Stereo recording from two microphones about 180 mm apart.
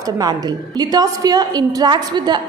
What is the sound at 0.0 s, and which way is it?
A woman's voice, 20° right (ahead or behind).